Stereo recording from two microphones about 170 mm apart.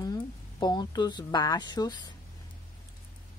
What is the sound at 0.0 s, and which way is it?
Speech, 25° left (ahead or behind).